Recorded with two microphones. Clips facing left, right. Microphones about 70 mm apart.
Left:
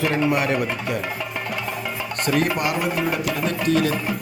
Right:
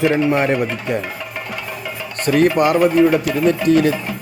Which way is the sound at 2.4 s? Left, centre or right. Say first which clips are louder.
Right 11 dB; right.